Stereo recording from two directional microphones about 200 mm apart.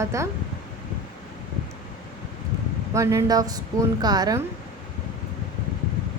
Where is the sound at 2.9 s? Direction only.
15° right (ahead or behind).